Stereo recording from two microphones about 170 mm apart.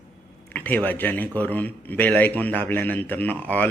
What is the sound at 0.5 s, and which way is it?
Speech, 10° left (ahead or behind).